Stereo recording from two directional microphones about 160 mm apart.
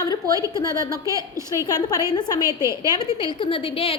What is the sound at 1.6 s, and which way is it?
Speech, 25° left (ahead or behind).